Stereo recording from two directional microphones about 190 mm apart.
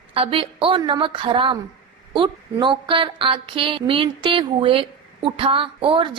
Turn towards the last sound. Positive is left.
turn(degrees=-25)  # may be behind; listen again after turning